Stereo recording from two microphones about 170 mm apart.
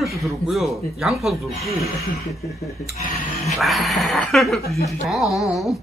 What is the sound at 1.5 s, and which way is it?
Speech, 35° right (ahead or behind).